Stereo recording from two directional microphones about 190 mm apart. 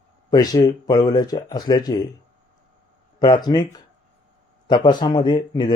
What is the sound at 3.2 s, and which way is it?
A man's voice, 20° left (ahead or behind).